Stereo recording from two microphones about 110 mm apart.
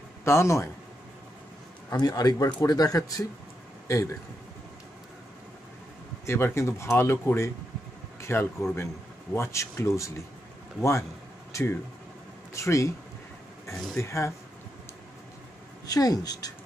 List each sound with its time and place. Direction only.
0.2 s speech: 25° left (ahead or behind)
1.9 s a man's voice: 35° left (ahead or behind)
6.2 s speech: 25° left (ahead or behind)
13.9 s speech: 25° left (ahead or behind)
15.9 s speech: 35° left (ahead or behind)